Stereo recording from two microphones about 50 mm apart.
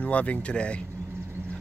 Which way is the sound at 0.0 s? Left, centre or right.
Left.